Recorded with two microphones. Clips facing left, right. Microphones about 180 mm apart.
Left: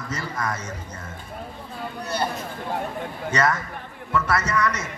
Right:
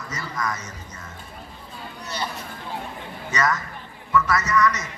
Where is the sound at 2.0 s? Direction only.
55° left (ahead or behind).